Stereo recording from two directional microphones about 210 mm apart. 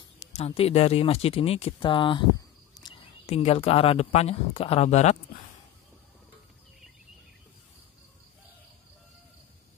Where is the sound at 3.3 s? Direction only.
30° left (ahead or behind).